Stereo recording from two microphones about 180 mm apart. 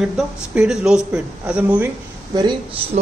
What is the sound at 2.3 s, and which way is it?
Speech, 25° right (ahead or behind).